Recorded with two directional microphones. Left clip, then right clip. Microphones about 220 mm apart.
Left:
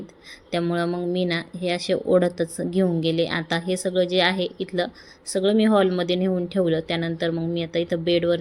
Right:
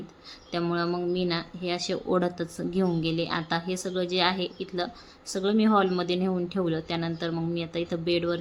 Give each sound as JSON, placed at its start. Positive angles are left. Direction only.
{"t": 0.5, "sound": "speech", "side_deg": 5}